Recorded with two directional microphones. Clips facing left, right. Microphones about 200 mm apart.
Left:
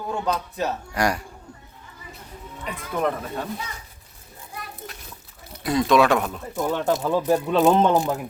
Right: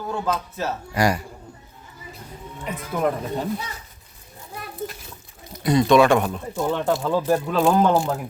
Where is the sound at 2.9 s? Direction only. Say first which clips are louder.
Right 2 dB; 10° right (ahead or behind).